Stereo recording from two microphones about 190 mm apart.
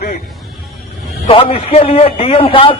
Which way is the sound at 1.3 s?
30° left (ahead or behind).